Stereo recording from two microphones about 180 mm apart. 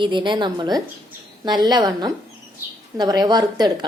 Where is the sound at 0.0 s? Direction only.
25° right (ahead or behind).